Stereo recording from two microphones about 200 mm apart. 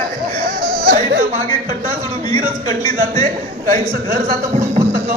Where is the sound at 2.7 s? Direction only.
20° left (ahead or behind).